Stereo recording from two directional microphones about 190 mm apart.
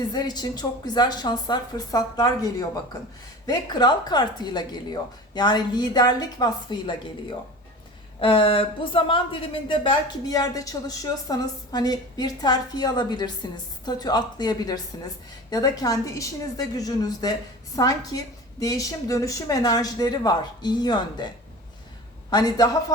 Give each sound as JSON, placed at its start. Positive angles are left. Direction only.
{"t": 0.1, "sound": "speech", "side_deg": 20}
{"t": 22.3, "sound": "speech", "side_deg": 20}